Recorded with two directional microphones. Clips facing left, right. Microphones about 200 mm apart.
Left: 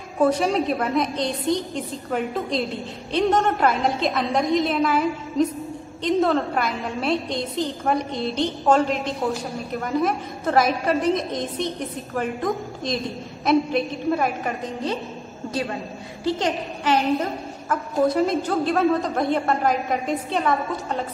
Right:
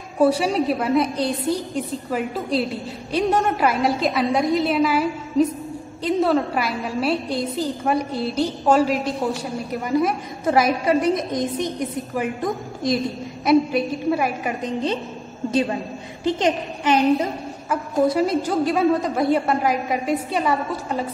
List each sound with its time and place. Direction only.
0.2 s a woman's voice: 10° right (ahead or behind)
10.4 s a woman's voice: 10° right (ahead or behind)
12.1 s a woman's voice: centre (ahead or behind)
16.3 s a woman's voice: 20° right (ahead or behind)